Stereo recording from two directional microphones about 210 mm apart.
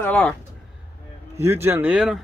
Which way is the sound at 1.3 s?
10° right (ahead or behind).